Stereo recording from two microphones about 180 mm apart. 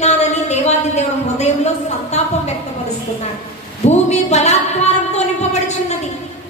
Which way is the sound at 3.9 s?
40° left (ahead or behind).